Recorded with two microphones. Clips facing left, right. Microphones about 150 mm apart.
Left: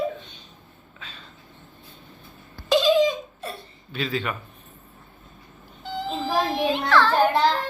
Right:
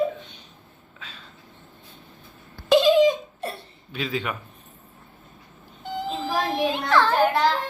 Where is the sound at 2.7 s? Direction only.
60° right (ahead or behind).